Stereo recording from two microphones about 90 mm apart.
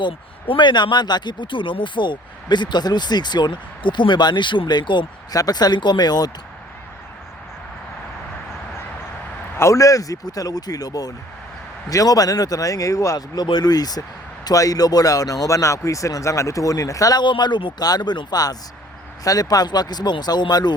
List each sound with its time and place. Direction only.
0.0 s speech: 70° left (ahead or behind)
5.3 s speech: 45° left (ahead or behind)
9.6 s speech: 35° left (ahead or behind)
17.2 s speech: 55° left (ahead or behind)
17.8 s speech: 50° left (ahead or behind)